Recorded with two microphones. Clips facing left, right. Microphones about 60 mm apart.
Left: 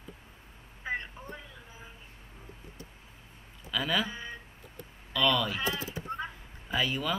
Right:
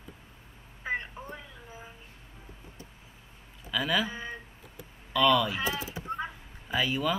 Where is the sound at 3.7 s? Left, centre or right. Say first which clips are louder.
Right 2 dB; centre.